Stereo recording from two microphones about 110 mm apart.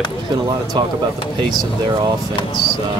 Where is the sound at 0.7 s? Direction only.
45° right (ahead or behind).